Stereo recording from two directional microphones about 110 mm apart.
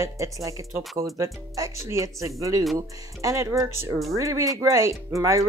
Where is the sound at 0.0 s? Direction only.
30° right (ahead or behind).